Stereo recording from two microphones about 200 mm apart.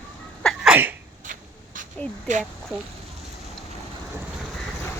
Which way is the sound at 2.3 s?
40° right (ahead or behind).